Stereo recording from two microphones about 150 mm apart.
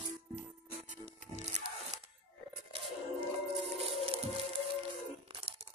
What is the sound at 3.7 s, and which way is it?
Music, 40° right (ahead or behind).